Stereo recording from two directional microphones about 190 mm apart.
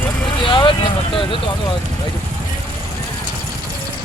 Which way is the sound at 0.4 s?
25° left (ahead or behind).